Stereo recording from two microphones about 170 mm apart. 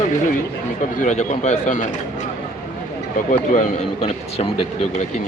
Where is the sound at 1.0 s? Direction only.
45° left (ahead or behind).